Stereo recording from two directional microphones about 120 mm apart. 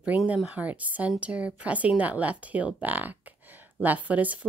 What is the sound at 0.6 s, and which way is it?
A woman's voice, 15° right (ahead or behind).